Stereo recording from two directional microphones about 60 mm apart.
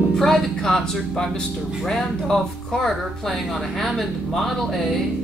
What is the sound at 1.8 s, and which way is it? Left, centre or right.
Speech, centre.